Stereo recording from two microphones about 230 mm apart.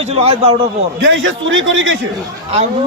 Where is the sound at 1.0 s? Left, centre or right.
Right.